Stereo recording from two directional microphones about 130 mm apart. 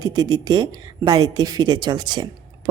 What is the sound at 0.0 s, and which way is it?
Speech, 30° right (ahead or behind).